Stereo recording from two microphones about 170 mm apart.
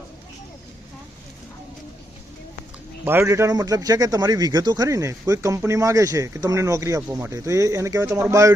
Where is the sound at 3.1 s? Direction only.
15° right (ahead or behind).